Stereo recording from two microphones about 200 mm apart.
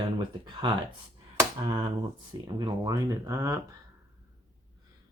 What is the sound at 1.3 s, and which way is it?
Speech, 20° right (ahead or behind).